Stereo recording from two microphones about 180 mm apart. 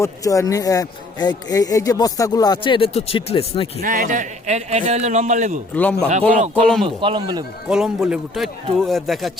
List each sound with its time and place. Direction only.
0.0 s speech: 20° left (ahead or behind)
3.8 s a man's voice: 50° right (ahead or behind)
5.7 s a man's voice: 10° left (ahead or behind)
6.8 s a man's voice: 30° right (ahead or behind)
7.7 s a man's voice: 5° right (ahead or behind)